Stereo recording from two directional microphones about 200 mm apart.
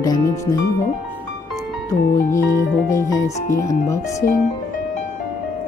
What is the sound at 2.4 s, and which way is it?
Speech, 15° left (ahead or behind).